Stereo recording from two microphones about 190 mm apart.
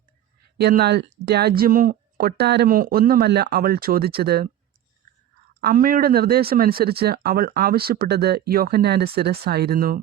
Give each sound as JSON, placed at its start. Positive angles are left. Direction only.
{"t": 0.6, "sound": "speech", "side_deg": -55}
{"t": 5.5, "sound": "speech", "side_deg": -50}